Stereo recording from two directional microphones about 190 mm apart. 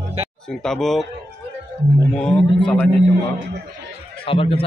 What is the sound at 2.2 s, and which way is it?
Speech, 5° left (ahead or behind).